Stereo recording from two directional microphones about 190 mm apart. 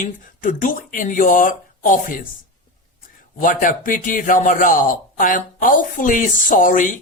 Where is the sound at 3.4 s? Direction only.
45° left (ahead or behind).